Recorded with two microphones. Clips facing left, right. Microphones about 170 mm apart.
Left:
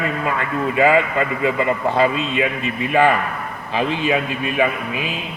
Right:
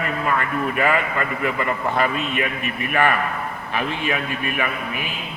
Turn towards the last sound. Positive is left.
turn(degrees=20)  # may be behind; listen again after turning